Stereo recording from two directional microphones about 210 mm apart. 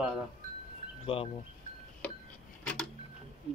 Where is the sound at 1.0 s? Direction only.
25° left (ahead or behind).